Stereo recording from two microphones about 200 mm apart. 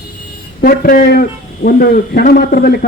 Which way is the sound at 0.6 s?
45° left (ahead or behind).